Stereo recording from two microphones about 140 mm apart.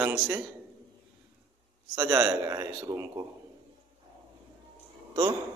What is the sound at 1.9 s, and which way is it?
Speech, 15° right (ahead or behind).